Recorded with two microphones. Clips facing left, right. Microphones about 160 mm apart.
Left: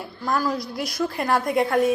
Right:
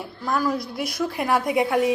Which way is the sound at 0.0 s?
5° right (ahead or behind).